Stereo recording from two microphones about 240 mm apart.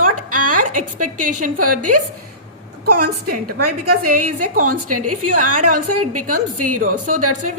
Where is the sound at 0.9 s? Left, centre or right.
Right.